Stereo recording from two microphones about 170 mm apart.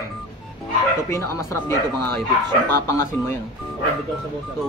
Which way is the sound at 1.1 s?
15° left (ahead or behind).